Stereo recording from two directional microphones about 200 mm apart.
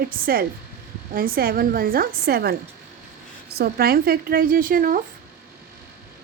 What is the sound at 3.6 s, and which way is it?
A woman's voice, 50° right (ahead or behind).